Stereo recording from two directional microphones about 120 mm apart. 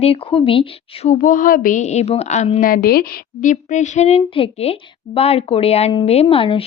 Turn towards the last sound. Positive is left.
turn(degrees=50)  # may be behind; listen again after turning